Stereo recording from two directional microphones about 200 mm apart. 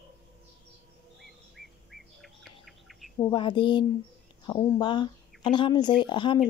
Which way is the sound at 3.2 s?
25° left (ahead or behind).